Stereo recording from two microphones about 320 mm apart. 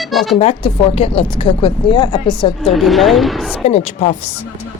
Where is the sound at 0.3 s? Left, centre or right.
Centre.